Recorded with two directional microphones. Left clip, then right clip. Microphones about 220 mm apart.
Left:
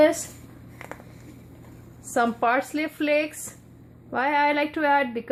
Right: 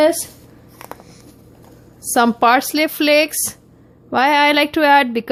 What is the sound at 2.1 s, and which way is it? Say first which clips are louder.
A woman's voice: right 9 dB; 45° right (ahead or behind).